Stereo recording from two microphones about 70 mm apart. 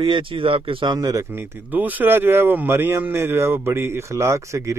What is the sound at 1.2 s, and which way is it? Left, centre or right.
Speech, right.